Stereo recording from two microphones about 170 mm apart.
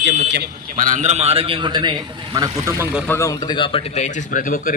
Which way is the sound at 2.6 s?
15° right (ahead or behind).